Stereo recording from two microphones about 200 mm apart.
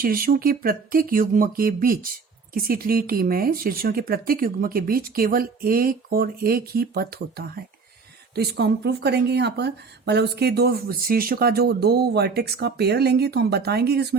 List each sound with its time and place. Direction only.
0.0 s speech: 45° right (ahead or behind)